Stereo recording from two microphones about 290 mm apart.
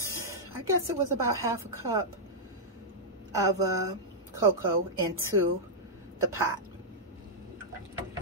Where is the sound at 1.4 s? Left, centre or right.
Centre.